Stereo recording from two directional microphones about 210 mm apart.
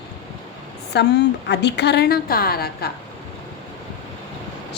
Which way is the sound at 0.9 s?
55° left (ahead or behind).